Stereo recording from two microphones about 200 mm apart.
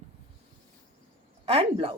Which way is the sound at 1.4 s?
30° right (ahead or behind).